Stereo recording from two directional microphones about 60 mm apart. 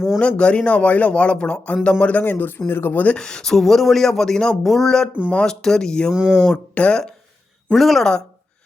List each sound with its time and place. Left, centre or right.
0.2 s speech: centre
3.2 s speech: centre
6.1 s speech: centre
6.7 s speech: centre
7.7 s speech: centre